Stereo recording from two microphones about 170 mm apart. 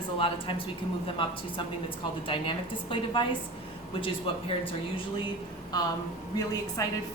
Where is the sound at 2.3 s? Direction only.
30° left (ahead or behind).